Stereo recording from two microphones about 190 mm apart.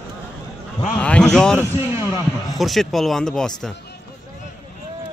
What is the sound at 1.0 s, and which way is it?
Speech, 5° left (ahead or behind).